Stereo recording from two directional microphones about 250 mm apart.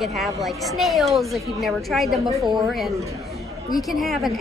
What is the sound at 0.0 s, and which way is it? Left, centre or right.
A woman's voice, centre.